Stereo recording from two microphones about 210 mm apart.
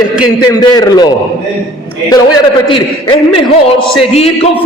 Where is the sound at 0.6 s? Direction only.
20° left (ahead or behind).